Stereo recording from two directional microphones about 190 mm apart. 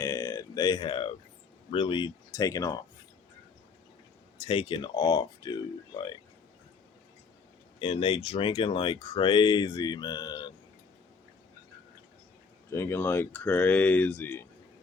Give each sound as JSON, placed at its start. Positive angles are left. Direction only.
{"t": 0.0, "sound": "a sound", "side_deg": 15}
{"t": 1.7, "sound": "speech", "side_deg": 25}
{"t": 4.4, "sound": "speech", "side_deg": 25}
{"t": 7.8, "sound": "speech", "side_deg": 30}
{"t": 12.7, "sound": "speech", "side_deg": 15}